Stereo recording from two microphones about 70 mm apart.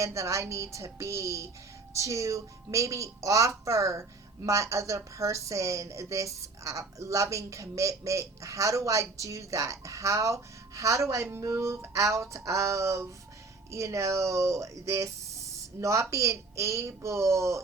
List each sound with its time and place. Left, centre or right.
0.0 s a woman's voice: right